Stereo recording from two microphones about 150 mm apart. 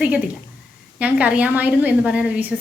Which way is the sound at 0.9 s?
10° right (ahead or behind).